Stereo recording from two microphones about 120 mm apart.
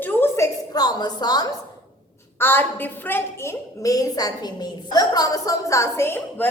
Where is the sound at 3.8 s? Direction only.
30° left (ahead or behind).